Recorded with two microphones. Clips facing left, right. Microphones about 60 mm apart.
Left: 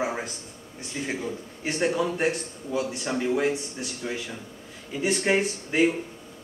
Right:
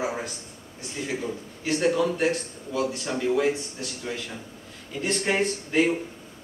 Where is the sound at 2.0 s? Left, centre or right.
Centre.